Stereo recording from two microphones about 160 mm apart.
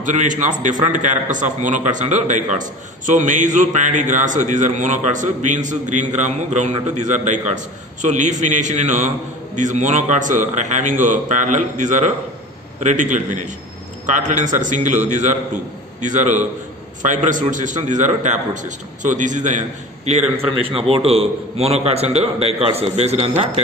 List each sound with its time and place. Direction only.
0.0 s a man's voice: 50° right (ahead or behind)
20.1 s a man's voice: 40° right (ahead or behind)